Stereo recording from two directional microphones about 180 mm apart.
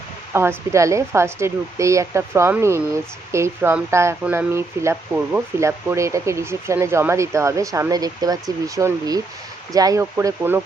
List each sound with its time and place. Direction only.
0.3 s speech: 15° right (ahead or behind)